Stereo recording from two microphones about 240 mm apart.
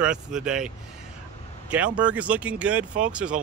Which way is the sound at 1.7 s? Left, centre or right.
Centre.